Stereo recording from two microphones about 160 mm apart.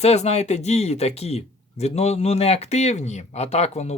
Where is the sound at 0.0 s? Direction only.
40° left (ahead or behind).